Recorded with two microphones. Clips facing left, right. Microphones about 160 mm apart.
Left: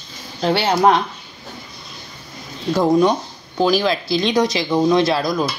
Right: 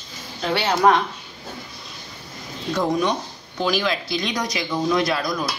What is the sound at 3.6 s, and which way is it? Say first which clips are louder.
Speech: left 6 dB; 35° left (ahead or behind).